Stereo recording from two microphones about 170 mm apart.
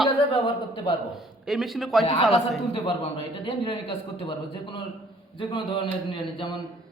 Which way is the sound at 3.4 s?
30° left (ahead or behind).